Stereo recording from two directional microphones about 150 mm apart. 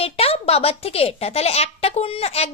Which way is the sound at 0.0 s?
40° left (ahead or behind).